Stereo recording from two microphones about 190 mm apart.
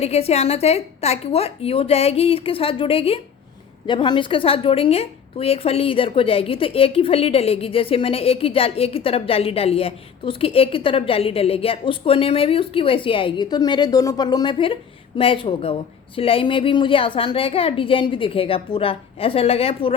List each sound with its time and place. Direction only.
0.0 s a woman's voice: 35° left (ahead or behind)